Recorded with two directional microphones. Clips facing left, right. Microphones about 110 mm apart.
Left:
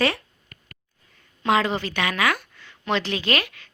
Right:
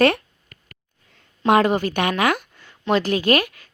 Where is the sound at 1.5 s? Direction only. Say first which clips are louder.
Right 5 dB; 50° right (ahead or behind).